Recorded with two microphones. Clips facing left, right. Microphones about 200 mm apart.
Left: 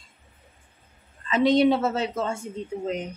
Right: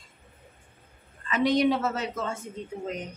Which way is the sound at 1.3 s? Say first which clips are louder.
Left 4 dB; 25° left (ahead or behind).